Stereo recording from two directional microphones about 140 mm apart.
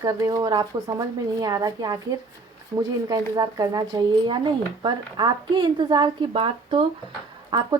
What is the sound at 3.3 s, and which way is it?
Speech, 25° right (ahead or behind).